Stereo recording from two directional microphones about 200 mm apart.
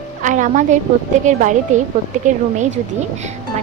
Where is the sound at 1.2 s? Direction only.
40° right (ahead or behind).